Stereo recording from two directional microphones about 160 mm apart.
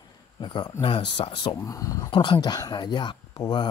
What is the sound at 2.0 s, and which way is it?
Speech, 30° left (ahead or behind).